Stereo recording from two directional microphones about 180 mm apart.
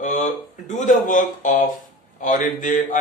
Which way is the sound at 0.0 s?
40° left (ahead or behind).